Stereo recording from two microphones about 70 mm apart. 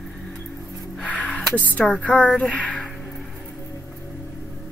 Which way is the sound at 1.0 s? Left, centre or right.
Centre.